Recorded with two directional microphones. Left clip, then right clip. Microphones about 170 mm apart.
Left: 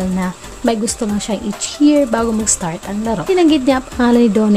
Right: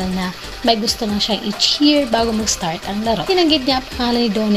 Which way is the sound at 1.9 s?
40° left (ahead or behind).